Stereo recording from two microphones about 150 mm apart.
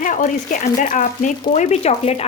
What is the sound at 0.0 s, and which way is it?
Speech, 60° left (ahead or behind).